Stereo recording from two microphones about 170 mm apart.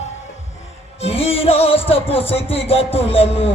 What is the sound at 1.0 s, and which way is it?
Music, 35° left (ahead or behind).